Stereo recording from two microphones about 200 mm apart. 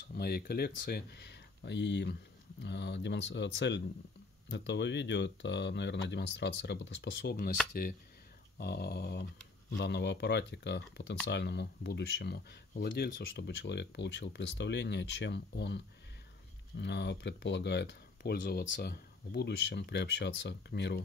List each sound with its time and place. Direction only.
0.1 s speech: 50° left (ahead or behind)
8.5 s speech: 55° left (ahead or behind)